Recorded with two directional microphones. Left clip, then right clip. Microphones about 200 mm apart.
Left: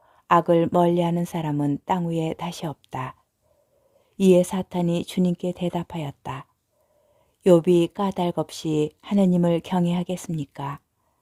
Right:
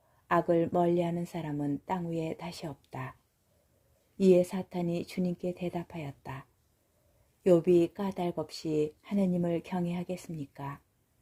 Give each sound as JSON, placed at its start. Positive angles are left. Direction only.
{"t": 0.3, "sound": "speech", "side_deg": 25}
{"t": 4.4, "sound": "speech", "side_deg": 25}